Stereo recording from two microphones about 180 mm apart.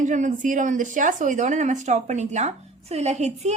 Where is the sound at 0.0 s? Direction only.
45° right (ahead or behind).